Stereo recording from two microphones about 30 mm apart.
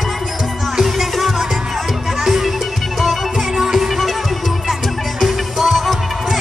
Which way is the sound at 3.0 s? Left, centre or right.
Centre.